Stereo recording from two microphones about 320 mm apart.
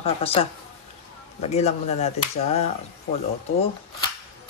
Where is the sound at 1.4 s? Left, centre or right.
Centre.